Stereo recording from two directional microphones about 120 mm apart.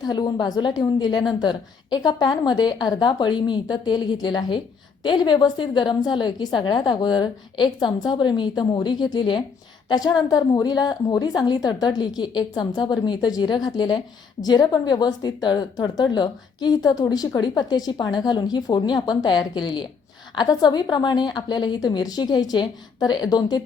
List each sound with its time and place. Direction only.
0.0 s a woman's voice: 35° left (ahead or behind)